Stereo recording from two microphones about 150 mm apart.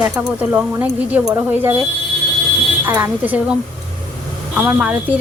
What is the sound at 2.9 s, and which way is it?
Speech, 15° right (ahead or behind).